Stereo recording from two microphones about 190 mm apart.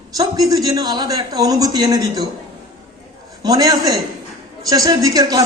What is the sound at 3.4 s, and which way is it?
A man's voice, 20° right (ahead or behind).